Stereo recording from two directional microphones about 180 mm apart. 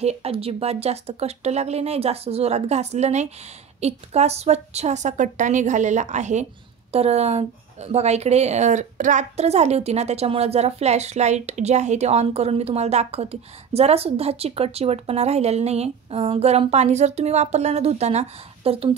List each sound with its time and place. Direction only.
0.0 s a woman's voice: 35° right (ahead or behind)